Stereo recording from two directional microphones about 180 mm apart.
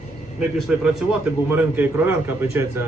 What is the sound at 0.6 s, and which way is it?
A man's voice, centre (ahead or behind).